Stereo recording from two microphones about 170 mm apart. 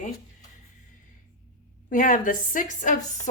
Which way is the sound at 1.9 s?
50° left (ahead or behind).